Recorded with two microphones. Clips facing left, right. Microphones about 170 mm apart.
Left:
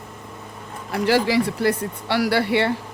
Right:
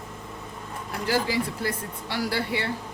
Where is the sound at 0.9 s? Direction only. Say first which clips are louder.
Left 7 dB; 75° left (ahead or behind).